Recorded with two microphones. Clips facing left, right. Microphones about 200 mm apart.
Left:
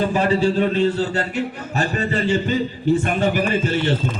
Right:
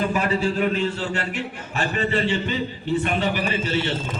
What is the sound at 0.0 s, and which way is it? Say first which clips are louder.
A man's voice: left 4 dB; 30° left (ahead or behind).